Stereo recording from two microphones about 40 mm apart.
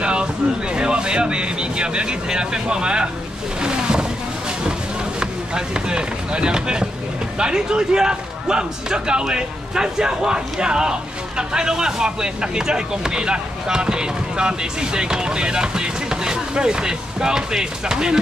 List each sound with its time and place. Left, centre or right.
0.0 s a sound: right
0.7 s speech: right
5.2 s speech: right